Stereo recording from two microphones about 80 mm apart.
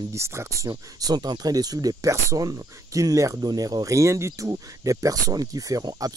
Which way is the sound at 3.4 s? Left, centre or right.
Right.